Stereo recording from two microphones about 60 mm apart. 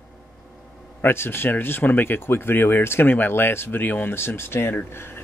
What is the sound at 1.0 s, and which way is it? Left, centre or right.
Speech, left.